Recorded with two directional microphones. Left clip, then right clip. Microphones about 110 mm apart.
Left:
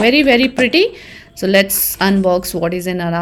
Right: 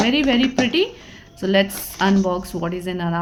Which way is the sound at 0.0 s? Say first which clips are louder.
Left 7 dB; 30° left (ahead or behind).